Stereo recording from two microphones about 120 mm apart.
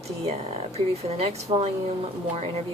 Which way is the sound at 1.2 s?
55° right (ahead or behind).